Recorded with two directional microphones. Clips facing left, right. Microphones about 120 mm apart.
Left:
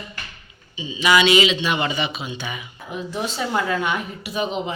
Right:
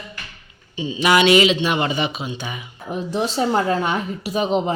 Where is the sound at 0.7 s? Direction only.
55° right (ahead or behind).